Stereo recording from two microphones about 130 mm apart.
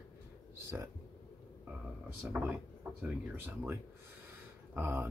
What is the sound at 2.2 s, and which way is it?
Speech, 20° right (ahead or behind).